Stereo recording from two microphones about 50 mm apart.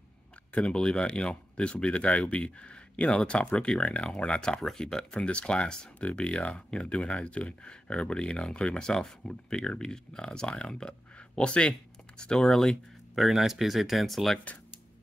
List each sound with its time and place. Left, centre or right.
0.5 s speech: centre
4.6 s speech: centre
5.1 s speech: left
12.2 s speech: centre